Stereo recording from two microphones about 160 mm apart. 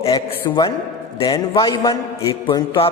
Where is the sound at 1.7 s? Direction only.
25° left (ahead or behind).